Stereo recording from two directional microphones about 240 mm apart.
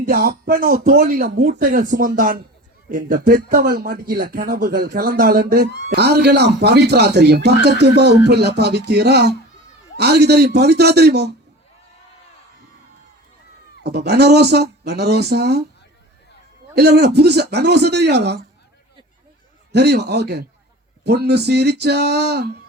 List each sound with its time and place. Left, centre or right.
0.0 s speech: right
13.8 s speech: right
16.7 s speech: right
19.7 s speech: right